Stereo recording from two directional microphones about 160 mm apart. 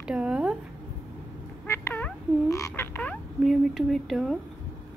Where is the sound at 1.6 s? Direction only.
15° left (ahead or behind).